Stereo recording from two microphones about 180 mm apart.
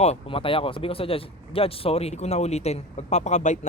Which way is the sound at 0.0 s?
35° left (ahead or behind).